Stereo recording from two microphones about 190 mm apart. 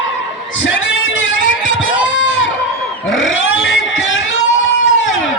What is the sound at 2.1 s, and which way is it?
Crowd, 80° left.